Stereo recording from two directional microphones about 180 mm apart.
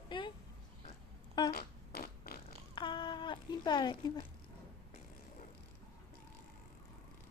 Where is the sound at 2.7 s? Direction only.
25° left (ahead or behind).